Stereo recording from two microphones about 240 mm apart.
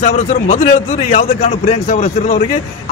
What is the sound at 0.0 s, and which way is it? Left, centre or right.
A man's voice, left.